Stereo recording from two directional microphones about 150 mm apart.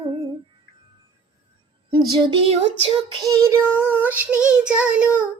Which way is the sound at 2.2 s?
40° right (ahead or behind).